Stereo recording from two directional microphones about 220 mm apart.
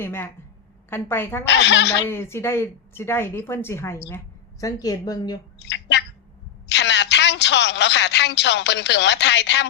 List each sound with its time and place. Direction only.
0.0 s speech: 10° left (ahead or behind)
1.5 s speech: 55° left (ahead or behind)
2.0 s speech: 10° left (ahead or behind)
5.5 s a woman's voice: 50° left (ahead or behind)